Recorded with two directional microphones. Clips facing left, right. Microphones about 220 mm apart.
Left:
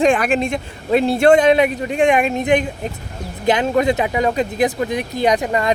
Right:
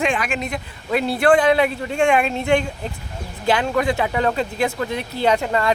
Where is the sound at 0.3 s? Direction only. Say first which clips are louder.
Left 7 dB; 30° left (ahead or behind).